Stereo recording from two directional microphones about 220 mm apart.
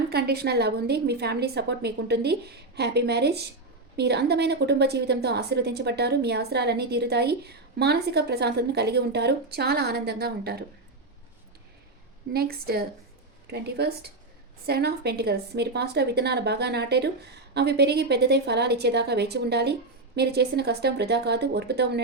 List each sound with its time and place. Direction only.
0.1 s a woman's voice: 45° right (ahead or behind)
12.3 s a woman's voice: 45° right (ahead or behind)